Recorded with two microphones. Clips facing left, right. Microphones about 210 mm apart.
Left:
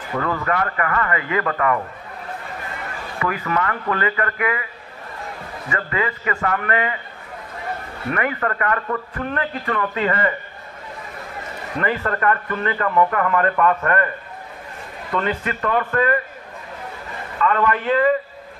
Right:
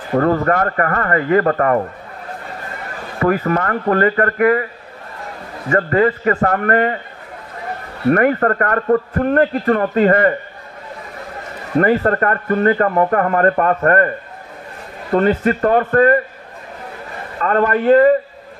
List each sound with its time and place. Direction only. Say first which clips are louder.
0.1 s a man's voice: right 8 dB; 45° right (ahead or behind)
3.2 s a man's voice: right 7 dB; 45° right (ahead or behind)
5.7 s a man's voice: right 10 dB; 45° right (ahead or behind)
8.1 s a man's voice: right 10 dB; 45° right (ahead or behind)
11.8 s a man's voice: right 7 dB; 45° right (ahead or behind)
17.4 s a man's voice: right 4 dB; 45° right (ahead or behind)